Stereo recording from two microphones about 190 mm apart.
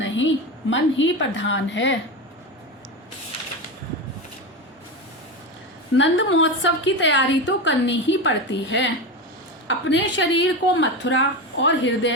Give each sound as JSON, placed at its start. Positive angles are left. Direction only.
{"t": 0.0, "sound": "a sound", "side_deg": 80}
{"t": 0.7, "sound": "a woman's voice", "side_deg": 80}
{"t": 6.0, "sound": "a woman's voice", "side_deg": 80}